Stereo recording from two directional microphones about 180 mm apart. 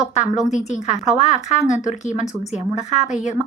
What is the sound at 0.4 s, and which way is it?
A woman's voice, 40° left (ahead or behind).